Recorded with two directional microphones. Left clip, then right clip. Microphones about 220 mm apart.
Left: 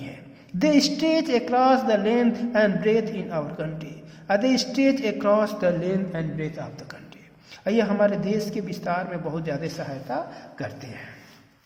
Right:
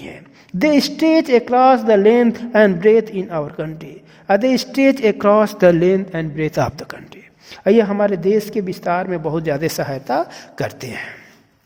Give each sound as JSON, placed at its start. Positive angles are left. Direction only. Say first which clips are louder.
{"t": 0.6, "sound": "speech", "louder": "right 6 dB", "side_deg": -40}